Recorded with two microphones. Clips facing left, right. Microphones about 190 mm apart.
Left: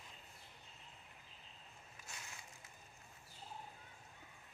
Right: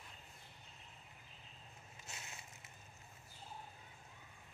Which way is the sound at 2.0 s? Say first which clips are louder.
Right 1 dB; 25° right (ahead or behind).